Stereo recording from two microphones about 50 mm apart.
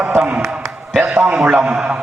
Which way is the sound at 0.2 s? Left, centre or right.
Right.